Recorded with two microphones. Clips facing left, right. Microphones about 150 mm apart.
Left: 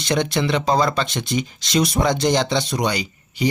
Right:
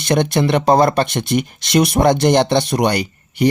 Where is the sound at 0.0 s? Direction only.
55° right (ahead or behind).